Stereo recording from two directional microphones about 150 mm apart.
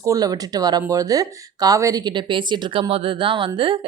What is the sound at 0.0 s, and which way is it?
Speech, 25° right (ahead or behind).